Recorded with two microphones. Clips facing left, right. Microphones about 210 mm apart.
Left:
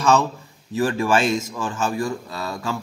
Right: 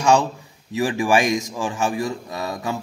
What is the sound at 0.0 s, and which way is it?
A man's voice, 15° right (ahead or behind).